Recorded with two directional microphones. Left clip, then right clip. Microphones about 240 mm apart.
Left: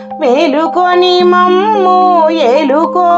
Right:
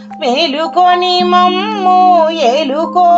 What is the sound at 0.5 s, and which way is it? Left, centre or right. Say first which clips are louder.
A woman's voice: left 1 dB; left.